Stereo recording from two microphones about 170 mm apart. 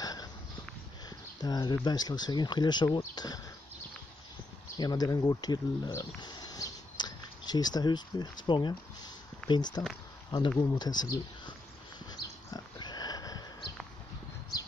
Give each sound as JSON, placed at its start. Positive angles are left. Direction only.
{"t": 0.0, "sound": "a sound", "side_deg": 20}
{"t": 1.4, "sound": "speech", "side_deg": 25}
{"t": 4.7, "sound": "speech", "side_deg": 25}
{"t": 12.1, "sound": "pig", "side_deg": 25}